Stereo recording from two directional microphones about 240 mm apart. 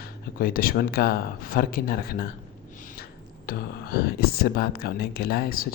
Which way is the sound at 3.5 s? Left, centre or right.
Left.